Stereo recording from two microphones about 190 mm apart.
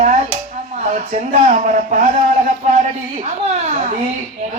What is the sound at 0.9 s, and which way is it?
Speech, 40° right (ahead or behind).